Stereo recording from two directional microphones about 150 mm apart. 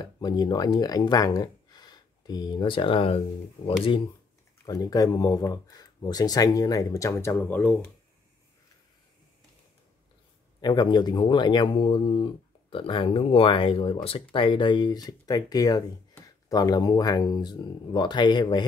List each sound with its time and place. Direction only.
0.0 s speech: 25° left (ahead or behind)
4.6 s speech: 25° left (ahead or behind)
10.6 s speech: 30° left (ahead or behind)